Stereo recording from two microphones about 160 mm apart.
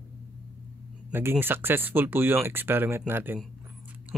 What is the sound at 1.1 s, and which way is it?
Speech, 15° right (ahead or behind).